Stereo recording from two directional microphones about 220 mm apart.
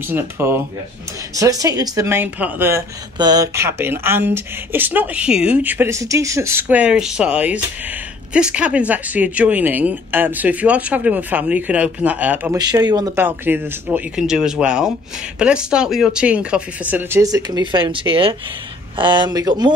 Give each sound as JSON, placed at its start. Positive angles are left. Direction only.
{"t": 0.1, "sound": "speech", "side_deg": -10}
{"t": 12.5, "sound": "speech", "side_deg": -20}